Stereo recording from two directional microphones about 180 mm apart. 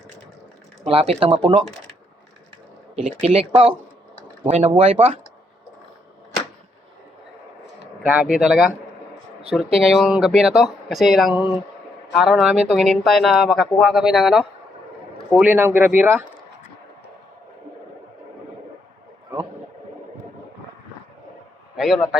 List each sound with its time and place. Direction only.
0.9 s speech: 35° right (ahead or behind)
3.1 s speech: 35° right (ahead or behind)
8.0 s speech: 5° right (ahead or behind)
9.8 s speech: centre (ahead or behind)
21.8 s speech: centre (ahead or behind)